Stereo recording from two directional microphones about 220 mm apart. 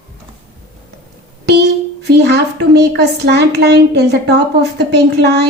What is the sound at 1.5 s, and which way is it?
Speech, 50° right (ahead or behind).